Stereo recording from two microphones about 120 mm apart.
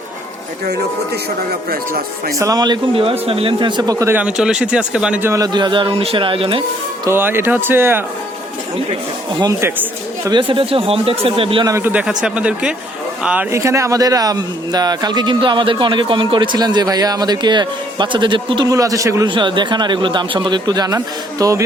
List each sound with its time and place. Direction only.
2.4 s a man's voice: 35° right (ahead or behind)
2.9 s speech: 50° right (ahead or behind)
3.9 s speech: 25° right (ahead or behind)
4.2 s speech: 5° right (ahead or behind)
5.2 s speech: 25° right (ahead or behind)
5.5 s speech: 40° right (ahead or behind)
7.1 s speech: 20° right (ahead or behind)
9.3 s a man's voice: 35° right (ahead or behind)
10.3 s speech: 45° right (ahead or behind)
11.8 s speech: 10° right (ahead or behind)
13.5 s a man's voice: 25° right (ahead or behind); by 18.7 s 45° right (ahead or behind)
18.7 s speech: 30° right (ahead or behind)
19.3 s a man's voice: 40° right (ahead or behind)